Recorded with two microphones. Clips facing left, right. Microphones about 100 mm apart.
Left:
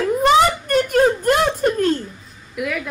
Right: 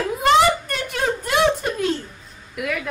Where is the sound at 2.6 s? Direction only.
Centre (ahead or behind).